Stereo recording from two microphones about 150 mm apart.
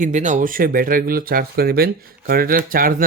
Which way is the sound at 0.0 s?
55° right (ahead or behind).